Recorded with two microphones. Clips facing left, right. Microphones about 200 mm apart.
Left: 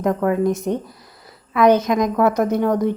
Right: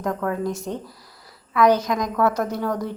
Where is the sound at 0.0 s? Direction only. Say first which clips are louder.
Left 6 dB; 20° left (ahead or behind).